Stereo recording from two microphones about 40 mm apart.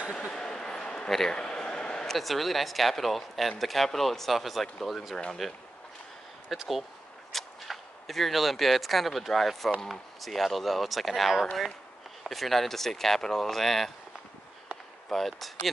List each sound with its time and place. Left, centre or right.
0.3 s a sound: centre
2.0 s speech: centre
5.1 s speech: centre
6.5 s speech: centre
15.0 s speech: centre